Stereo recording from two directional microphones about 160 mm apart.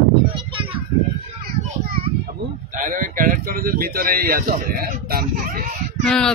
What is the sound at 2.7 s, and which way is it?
Speech, 55° right (ahead or behind).